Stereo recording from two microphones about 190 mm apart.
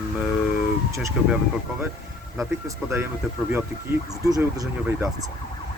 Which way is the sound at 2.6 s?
15° right (ahead or behind).